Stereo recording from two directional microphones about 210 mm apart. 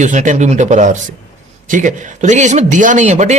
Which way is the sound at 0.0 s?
35° right (ahead or behind).